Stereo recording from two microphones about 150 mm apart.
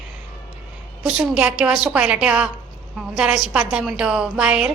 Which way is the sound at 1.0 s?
5° right (ahead or behind).